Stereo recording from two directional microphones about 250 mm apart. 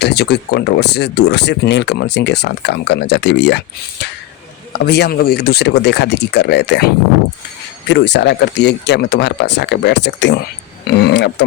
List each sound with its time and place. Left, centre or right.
0.0 s speech: left
4.7 s speech: left